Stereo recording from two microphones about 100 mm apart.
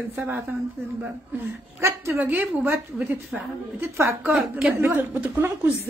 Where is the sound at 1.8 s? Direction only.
25° right (ahead or behind).